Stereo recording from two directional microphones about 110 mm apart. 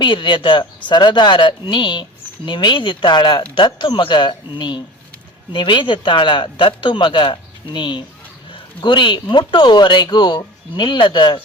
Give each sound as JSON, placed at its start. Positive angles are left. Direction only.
{"t": 0.0, "sound": "speech", "side_deg": 45}